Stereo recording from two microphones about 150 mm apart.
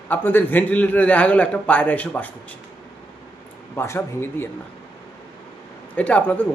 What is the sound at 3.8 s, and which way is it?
Speech, 15° left (ahead or behind).